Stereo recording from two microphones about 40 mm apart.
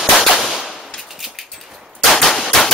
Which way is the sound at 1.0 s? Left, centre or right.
Centre.